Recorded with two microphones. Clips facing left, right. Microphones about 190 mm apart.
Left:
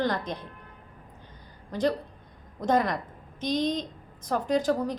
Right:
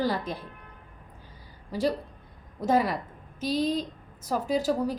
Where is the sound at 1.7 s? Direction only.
5° right (ahead or behind).